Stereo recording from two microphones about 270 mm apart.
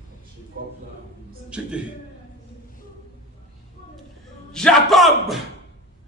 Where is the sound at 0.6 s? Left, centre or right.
Right.